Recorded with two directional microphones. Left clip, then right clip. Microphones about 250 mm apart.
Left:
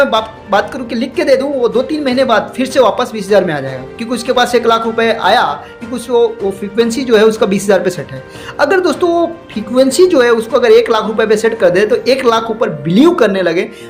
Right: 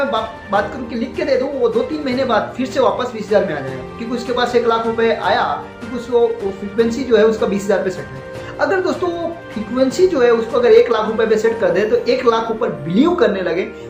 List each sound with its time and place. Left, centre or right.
0.1 s speech: left